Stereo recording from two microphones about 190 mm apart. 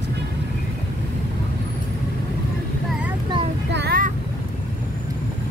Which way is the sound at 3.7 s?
65° right (ahead or behind).